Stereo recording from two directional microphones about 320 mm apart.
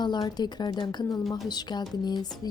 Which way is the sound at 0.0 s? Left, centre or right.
Centre.